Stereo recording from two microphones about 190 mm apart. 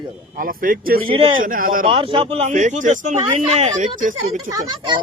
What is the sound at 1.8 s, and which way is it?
Speech, 25° right (ahead or behind).